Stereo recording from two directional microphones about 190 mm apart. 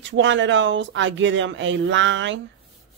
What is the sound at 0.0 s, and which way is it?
Speech, 70° right (ahead or behind).